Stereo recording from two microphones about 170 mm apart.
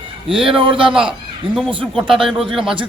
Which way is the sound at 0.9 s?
5° right (ahead or behind).